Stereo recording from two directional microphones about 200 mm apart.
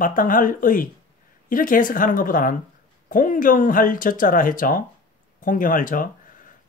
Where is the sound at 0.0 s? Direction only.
45° left (ahead or behind).